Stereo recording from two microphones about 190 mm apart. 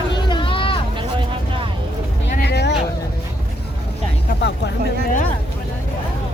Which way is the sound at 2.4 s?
60° left (ahead or behind).